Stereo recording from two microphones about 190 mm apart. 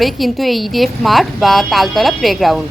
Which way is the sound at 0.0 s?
Centre (ahead or behind).